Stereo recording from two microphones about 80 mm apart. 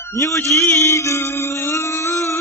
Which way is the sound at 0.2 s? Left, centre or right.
Left.